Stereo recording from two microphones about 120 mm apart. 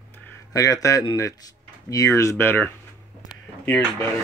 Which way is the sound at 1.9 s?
30° left (ahead or behind).